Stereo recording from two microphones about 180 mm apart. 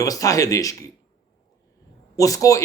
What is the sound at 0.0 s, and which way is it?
Speech, 20° left (ahead or behind).